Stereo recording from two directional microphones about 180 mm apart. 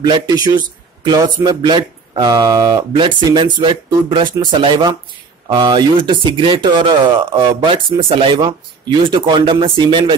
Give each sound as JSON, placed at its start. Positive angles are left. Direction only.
{"t": 0.0, "sound": "speech", "side_deg": -25}